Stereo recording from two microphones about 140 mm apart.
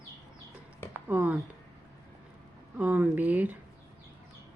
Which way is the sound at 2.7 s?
10° right (ahead or behind).